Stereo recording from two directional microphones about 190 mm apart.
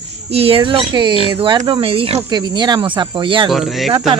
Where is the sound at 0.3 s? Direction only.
30° right (ahead or behind).